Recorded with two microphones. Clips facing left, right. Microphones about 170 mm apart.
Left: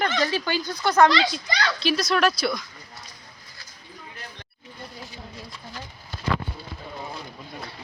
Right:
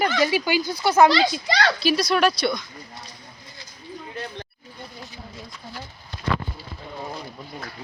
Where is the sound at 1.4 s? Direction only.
75° right (ahead or behind).